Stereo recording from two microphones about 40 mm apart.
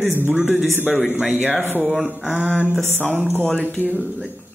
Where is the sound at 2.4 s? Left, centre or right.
Left.